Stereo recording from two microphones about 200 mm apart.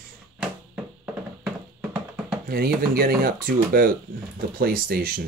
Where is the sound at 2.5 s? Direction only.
50° right (ahead or behind).